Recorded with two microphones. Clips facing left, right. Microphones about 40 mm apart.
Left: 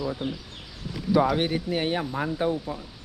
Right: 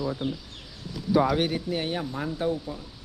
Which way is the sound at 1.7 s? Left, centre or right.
Left.